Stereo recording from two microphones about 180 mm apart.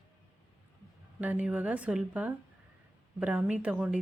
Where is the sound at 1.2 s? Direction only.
5° right (ahead or behind).